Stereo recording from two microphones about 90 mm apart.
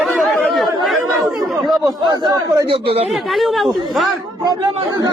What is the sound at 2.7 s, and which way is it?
Speech, 90° right.